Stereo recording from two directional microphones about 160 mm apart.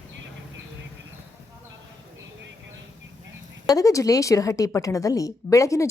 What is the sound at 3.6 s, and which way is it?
A woman's voice, 20° left (ahead or behind).